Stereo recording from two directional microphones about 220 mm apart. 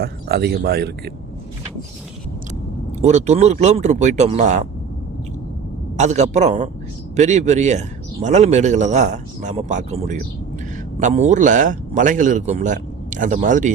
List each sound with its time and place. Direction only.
0.0 s speech: 45° right (ahead or behind)
3.0 s speech: 30° right (ahead or behind)
6.0 s speech: 30° right (ahead or behind)